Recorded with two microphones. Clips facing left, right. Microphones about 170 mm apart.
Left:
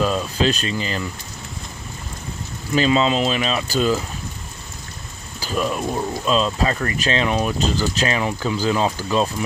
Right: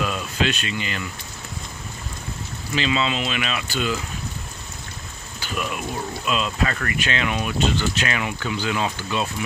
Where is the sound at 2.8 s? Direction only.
40° left (ahead or behind).